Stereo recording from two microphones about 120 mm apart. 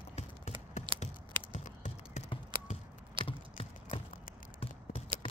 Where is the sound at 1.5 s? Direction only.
85° left.